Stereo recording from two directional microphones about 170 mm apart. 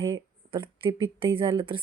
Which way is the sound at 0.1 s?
30° right (ahead or behind).